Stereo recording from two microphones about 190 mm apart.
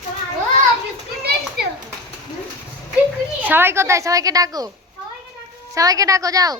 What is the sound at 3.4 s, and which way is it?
A woman's voice, 10° right (ahead or behind).